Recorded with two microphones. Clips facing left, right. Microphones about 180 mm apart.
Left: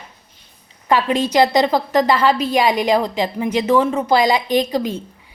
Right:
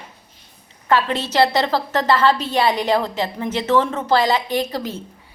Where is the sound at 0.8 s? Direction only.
15° left (ahead or behind).